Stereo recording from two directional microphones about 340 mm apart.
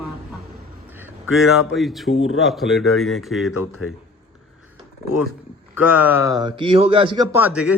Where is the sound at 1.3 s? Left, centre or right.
Left.